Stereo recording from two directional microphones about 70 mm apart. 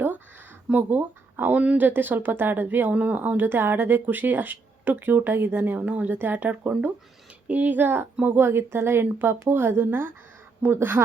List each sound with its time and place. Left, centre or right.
0.7 s speech: right